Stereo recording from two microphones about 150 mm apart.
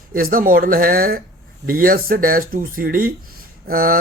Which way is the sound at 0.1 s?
70° right (ahead or behind).